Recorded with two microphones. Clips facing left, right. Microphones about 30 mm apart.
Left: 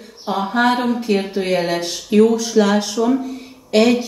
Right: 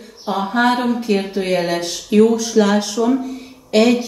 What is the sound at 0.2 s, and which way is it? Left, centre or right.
Speech, centre.